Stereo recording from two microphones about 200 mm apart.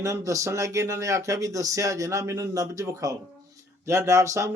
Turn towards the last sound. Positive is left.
turn(degrees=-15)  # may be behind; listen again after turning